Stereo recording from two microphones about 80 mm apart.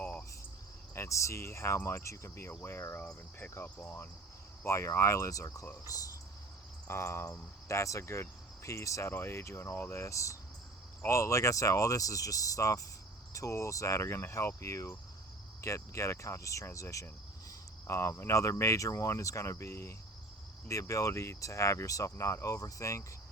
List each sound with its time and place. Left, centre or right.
0.0 s cricket: centre
0.9 s speech: left
2.6 s cricket: left
4.6 s speech: left
6.8 s speech: left
9.9 s speech: left